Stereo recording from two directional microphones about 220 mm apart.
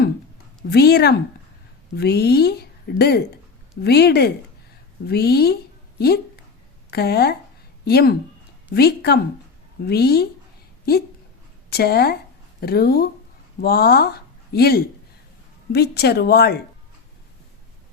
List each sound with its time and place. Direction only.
0.7 s a woman's voice: 45° left (ahead or behind)
6.9 s a woman's voice: 45° left (ahead or behind)
11.7 s a woman's voice: 45° left (ahead or behind)